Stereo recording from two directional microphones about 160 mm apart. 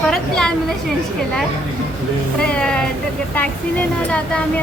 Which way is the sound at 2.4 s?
5° left (ahead or behind).